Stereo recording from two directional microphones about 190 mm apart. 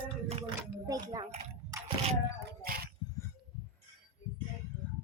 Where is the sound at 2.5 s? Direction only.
55° right (ahead or behind).